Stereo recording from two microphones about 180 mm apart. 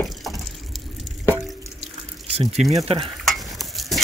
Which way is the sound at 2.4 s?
35° right (ahead or behind).